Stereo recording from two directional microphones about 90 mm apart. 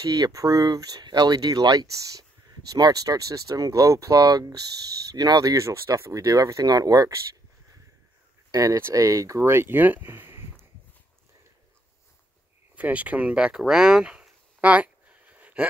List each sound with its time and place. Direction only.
0.0 s speech: 45° right (ahead or behind)
8.5 s speech: 40° right (ahead or behind)
12.7 s a sound: 15° right (ahead or behind)